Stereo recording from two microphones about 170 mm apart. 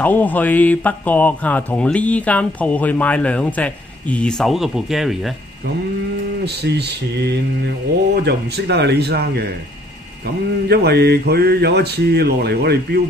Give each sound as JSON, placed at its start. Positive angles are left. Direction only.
{"t": 0.0, "sound": "speech", "side_deg": 10}
{"t": 6.4, "sound": "speech", "side_deg": -75}
{"t": 10.7, "sound": "speech", "side_deg": -70}